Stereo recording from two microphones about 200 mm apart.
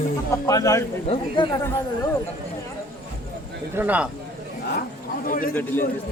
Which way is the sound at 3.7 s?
10° right (ahead or behind).